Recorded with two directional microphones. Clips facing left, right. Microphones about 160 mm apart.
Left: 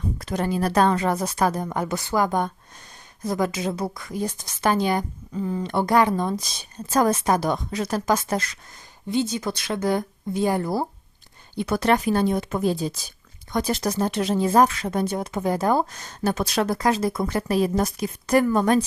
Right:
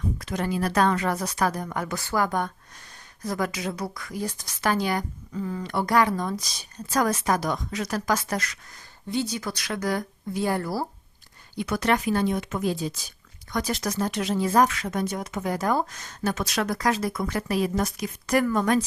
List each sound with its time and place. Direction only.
0.2 s speech: 35° left (ahead or behind)
11.5 s speech: 30° left (ahead or behind)